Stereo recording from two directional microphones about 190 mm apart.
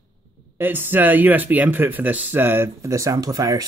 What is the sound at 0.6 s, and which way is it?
Speech, 10° right (ahead or behind).